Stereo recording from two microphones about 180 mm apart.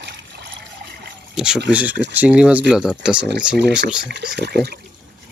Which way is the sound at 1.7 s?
5° right (ahead or behind).